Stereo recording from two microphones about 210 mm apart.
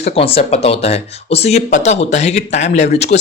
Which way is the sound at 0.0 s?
25° left (ahead or behind).